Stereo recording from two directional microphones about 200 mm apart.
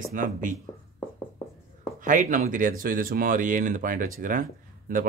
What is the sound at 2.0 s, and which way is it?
Speech, 40° right (ahead or behind).